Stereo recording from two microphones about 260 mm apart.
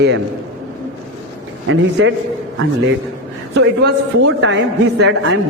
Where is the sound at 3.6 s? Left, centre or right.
Right.